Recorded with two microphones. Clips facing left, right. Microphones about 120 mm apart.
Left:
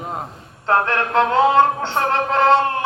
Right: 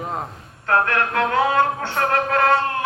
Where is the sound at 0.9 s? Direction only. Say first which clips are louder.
Left 3 dB; 25° left (ahead or behind).